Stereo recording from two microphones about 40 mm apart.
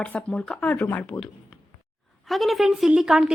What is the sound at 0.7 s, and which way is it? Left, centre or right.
Speech, left.